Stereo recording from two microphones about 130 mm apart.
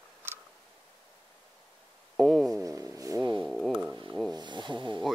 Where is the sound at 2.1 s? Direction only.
Centre (ahead or behind).